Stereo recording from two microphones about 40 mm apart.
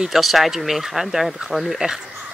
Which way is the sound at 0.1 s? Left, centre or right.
Centre.